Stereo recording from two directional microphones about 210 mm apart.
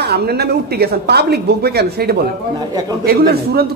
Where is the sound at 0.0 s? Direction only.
50° right (ahead or behind).